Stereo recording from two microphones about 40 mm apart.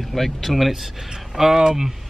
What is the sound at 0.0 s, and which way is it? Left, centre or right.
Speech, centre.